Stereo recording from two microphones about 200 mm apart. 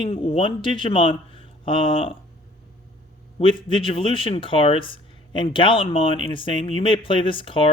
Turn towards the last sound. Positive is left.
turn(degrees=25)  # may be behind; listen again after turning